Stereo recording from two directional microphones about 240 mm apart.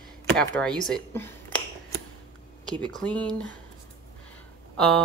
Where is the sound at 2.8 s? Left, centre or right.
Centre.